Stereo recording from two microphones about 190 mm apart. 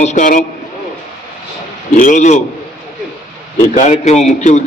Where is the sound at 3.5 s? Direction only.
30° left (ahead or behind).